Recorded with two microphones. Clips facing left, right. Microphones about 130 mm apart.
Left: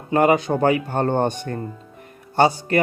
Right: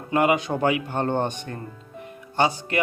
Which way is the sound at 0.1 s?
40° left (ahead or behind).